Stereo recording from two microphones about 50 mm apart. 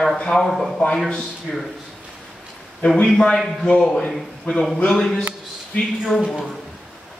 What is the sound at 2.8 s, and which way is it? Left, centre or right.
A man's voice, centre.